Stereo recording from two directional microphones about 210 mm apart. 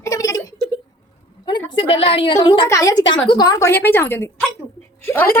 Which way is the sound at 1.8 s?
25° left (ahead or behind).